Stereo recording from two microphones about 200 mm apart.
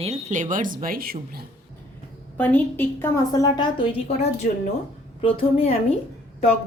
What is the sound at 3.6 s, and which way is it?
A woman's voice, 25° left (ahead or behind).